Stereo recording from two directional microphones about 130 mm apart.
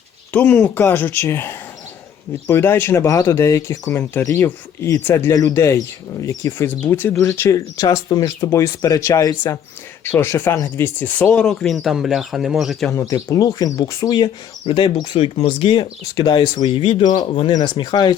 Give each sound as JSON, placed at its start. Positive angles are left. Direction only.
{"t": 0.3, "sound": "speech", "side_deg": 15}
{"t": 12.9, "sound": "speech", "side_deg": 25}